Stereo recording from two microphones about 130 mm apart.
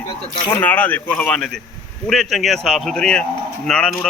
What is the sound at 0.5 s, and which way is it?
Speech, 15° left (ahead or behind).